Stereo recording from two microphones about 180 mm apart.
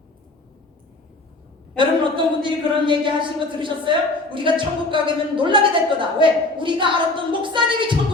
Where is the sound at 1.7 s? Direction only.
25° right (ahead or behind).